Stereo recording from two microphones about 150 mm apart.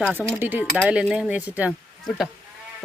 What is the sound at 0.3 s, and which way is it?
Speech, 15° right (ahead or behind).